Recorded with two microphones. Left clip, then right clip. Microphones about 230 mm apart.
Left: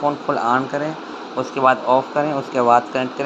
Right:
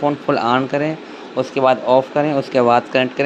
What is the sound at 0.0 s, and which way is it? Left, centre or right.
Speech, right.